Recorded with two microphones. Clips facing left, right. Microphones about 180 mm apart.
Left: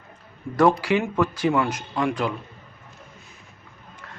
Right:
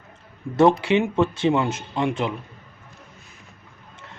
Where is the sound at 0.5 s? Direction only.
25° right (ahead or behind).